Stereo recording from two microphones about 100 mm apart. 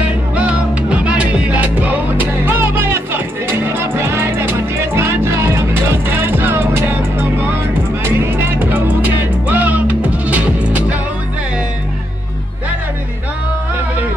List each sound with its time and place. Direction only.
0.0 s music: 10° right (ahead or behind)